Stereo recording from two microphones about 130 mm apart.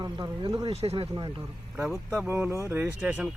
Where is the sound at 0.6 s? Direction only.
50° right (ahead or behind).